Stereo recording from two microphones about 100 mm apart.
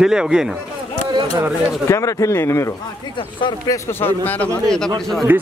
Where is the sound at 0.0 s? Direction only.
10° right (ahead or behind).